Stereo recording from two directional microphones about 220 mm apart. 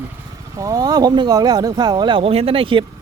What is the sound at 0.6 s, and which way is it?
Speech, 15° right (ahead or behind).